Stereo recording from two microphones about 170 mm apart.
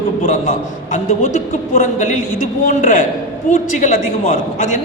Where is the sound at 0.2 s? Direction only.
45° left (ahead or behind).